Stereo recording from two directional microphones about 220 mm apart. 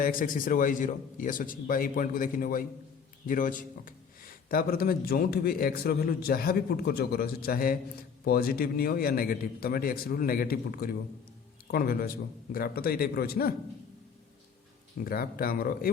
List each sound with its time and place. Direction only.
0.0 s a man's voice: 40° left (ahead or behind)
15.0 s a man's voice: 40° left (ahead or behind)